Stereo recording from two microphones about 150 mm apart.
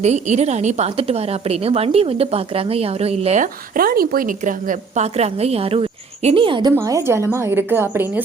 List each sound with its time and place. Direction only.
0.0 s a woman's voice: 50° right (ahead or behind)
3.4 s a woman's voice: 75° right (ahead or behind); by 6.7 s 30° right (ahead or behind)
6.7 s a woman's voice: 20° right (ahead or behind)